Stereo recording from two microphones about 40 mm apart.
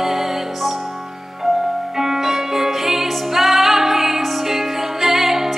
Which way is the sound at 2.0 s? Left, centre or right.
Centre.